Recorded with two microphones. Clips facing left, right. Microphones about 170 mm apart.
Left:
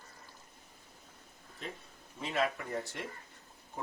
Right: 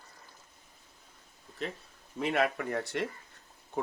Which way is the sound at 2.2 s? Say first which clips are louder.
Right 4 dB; 65° right (ahead or behind).